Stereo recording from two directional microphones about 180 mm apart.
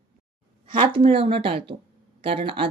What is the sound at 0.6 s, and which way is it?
Speech, 25° right (ahead or behind).